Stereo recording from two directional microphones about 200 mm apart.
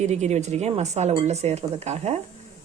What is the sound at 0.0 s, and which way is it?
Speech, 35° right (ahead or behind).